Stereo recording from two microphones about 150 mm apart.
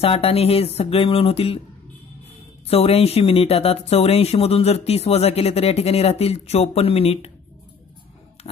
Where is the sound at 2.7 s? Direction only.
40° left (ahead or behind).